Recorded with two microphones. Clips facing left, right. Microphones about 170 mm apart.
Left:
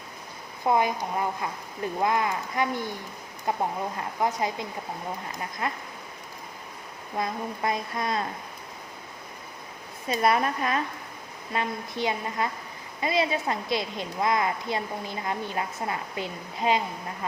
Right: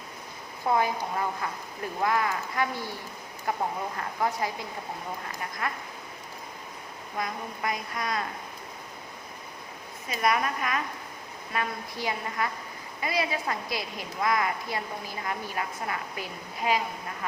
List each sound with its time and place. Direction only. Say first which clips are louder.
0.6 s a woman's voice: left 2 dB; 20° left (ahead or behind)
5.6 s a woman's voice: left 2 dB; 25° left (ahead or behind)
7.2 s a woman's voice: left 4 dB; 25° left (ahead or behind)
10.1 s a woman's voice: left 3 dB; 30° left (ahead or behind)